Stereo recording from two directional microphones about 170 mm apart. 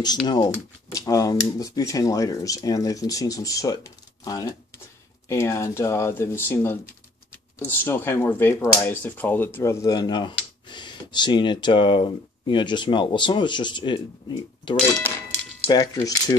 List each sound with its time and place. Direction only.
0.0 s speech: 25° left (ahead or behind)